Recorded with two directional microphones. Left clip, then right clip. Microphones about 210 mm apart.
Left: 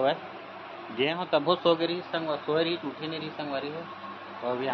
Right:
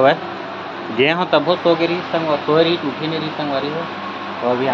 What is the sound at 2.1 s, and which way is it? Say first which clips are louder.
Speech: right 12 dB; centre (ahead or behind).